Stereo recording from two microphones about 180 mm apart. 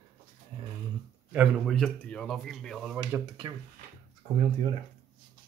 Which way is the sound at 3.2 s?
25° right (ahead or behind).